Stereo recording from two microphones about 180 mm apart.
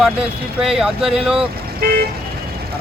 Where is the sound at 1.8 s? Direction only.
55° right (ahead or behind).